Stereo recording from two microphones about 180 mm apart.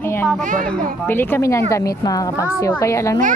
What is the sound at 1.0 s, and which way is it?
A woman's voice, 10° left (ahead or behind).